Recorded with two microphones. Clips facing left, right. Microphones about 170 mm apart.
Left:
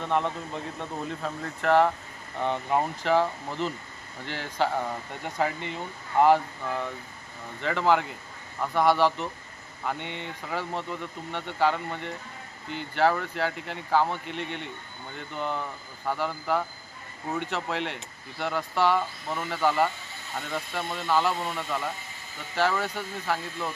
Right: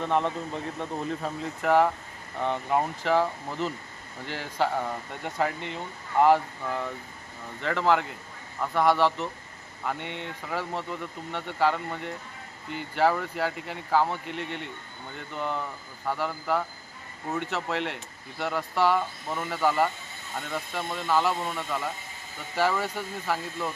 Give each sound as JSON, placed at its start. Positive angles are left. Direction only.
{"t": 0.0, "sound": "speech", "side_deg": 0}